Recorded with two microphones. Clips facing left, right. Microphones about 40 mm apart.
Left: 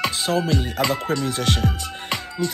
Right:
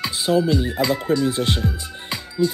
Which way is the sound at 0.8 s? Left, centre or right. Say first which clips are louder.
Right 3 dB; left.